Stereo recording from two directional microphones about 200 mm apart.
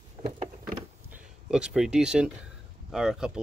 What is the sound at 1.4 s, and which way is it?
Speech, 5° right (ahead or behind).